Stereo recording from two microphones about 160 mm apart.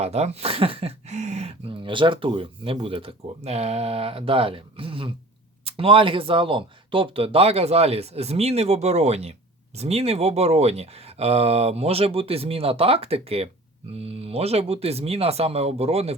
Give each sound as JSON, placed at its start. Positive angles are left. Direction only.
{"t": 0.0, "sound": "speech", "side_deg": -40}